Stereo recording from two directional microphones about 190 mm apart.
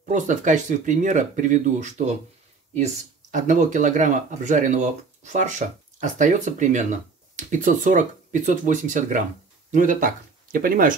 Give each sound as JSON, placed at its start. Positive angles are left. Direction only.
{"t": 0.1, "sound": "speech", "side_deg": -40}